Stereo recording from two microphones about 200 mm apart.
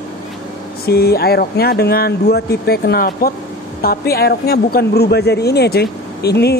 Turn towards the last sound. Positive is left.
turn(degrees=55)  # may be behind; listen again after turning